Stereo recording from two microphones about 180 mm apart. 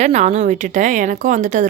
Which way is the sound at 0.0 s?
40° right (ahead or behind).